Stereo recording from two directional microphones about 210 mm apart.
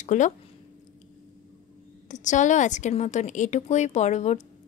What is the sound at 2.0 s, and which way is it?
A woman's voice, 35° left (ahead or behind).